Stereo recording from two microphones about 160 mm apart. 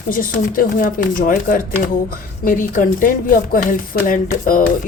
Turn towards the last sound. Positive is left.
turn(degrees=55)  # may be behind; listen again after turning